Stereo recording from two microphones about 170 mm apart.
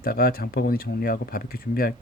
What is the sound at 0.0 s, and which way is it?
Speech, 60° left (ahead or behind).